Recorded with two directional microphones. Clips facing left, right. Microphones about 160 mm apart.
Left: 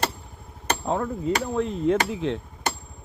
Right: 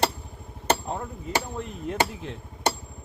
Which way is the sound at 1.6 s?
90° left.